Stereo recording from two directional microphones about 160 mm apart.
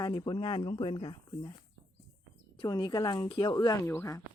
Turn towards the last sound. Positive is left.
turn(degrees=15)  # may be behind; listen again after turning